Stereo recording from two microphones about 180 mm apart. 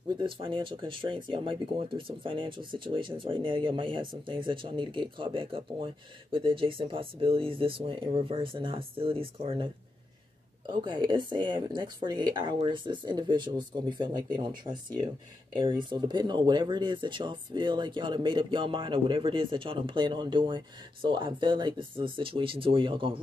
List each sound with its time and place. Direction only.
0.1 s speech: 30° right (ahead or behind)
10.7 s speech: 25° right (ahead or behind)